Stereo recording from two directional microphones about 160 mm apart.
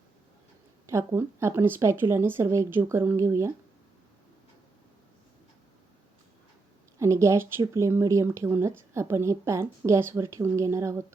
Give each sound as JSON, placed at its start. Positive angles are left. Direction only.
{"t": 0.9, "sound": "a woman's voice", "side_deg": -15}
{"t": 7.0, "sound": "a woman's voice", "side_deg": -20}